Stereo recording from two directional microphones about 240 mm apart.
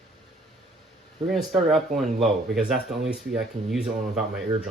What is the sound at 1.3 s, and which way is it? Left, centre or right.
Speech, centre.